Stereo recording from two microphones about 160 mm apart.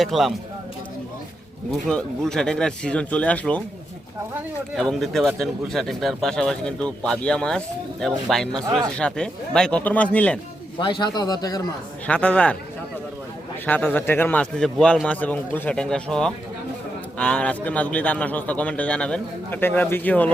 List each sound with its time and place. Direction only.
0.0 s speech: centre (ahead or behind)
1.7 s a man's voice: 5° left (ahead or behind)
4.8 s a man's voice: centre (ahead or behind)
10.8 s a man's voice: 30° left (ahead or behind)
12.0 s a man's voice: 5° left (ahead or behind)
13.7 s a man's voice: 10° left (ahead or behind)